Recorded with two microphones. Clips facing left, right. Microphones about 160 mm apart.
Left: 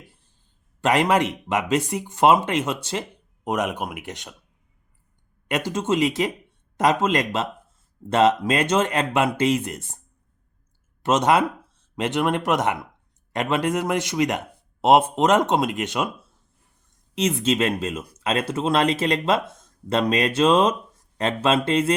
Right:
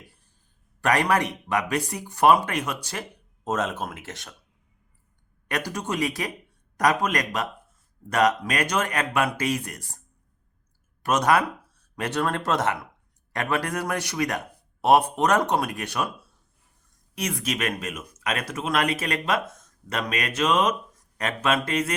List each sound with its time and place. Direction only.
0.8 s speech: 20° left (ahead or behind)
5.5 s speech: 20° left (ahead or behind)
11.0 s speech: 25° left (ahead or behind)
17.2 s speech: 25° left (ahead or behind)